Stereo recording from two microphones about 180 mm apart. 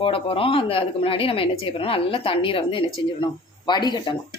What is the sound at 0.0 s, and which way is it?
A woman's voice, 30° left (ahead or behind).